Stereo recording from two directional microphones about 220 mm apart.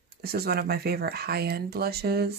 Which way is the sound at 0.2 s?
45° right (ahead or behind).